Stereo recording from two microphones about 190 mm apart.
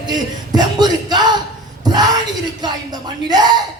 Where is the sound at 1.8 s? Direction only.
20° right (ahead or behind).